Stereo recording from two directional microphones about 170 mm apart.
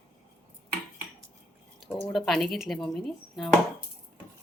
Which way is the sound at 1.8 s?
Centre (ahead or behind).